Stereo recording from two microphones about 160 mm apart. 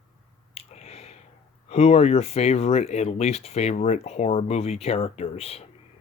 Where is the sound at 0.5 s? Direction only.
40° left (ahead or behind).